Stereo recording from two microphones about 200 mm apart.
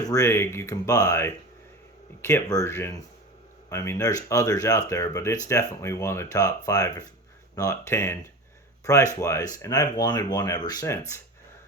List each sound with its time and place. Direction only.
0.0 s speech: 15° left (ahead or behind)